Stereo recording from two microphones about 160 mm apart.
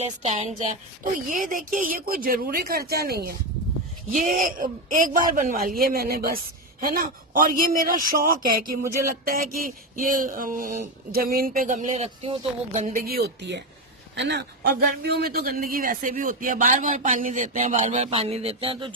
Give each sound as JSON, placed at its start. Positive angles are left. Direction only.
{"t": 0.0, "sound": "a woman's voice", "side_deg": -45}
{"t": 1.3, "sound": "speech", "side_deg": -55}
{"t": 4.1, "sound": "a man's voice", "side_deg": -50}